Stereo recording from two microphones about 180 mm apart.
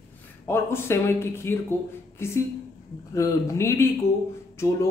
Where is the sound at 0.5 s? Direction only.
15° left (ahead or behind).